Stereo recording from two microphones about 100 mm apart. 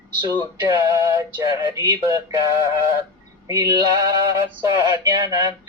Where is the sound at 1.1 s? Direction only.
35° right (ahead or behind).